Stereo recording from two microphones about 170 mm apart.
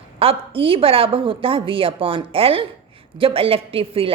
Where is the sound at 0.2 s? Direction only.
35° right (ahead or behind).